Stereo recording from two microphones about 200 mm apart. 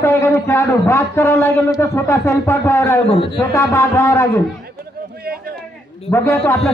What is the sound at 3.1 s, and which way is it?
Speech, 25° left (ahead or behind).